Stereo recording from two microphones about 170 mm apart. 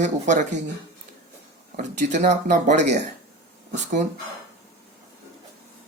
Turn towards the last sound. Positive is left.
turn(degrees=-45)  # may be behind; listen again after turning